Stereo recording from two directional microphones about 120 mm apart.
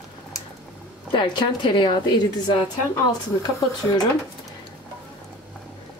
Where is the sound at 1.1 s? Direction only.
40° left (ahead or behind).